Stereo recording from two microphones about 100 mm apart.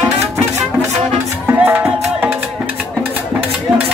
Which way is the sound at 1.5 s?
20° right (ahead or behind).